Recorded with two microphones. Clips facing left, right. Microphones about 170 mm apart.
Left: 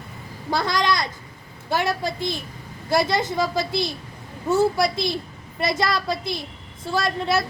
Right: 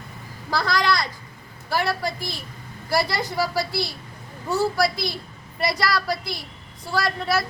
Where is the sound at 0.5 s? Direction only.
20° left (ahead or behind).